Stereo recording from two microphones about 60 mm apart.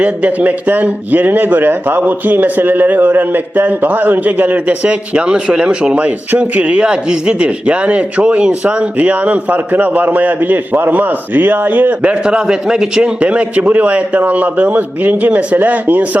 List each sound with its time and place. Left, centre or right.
0.0 s a man's voice: right
12.2 s a man's voice: centre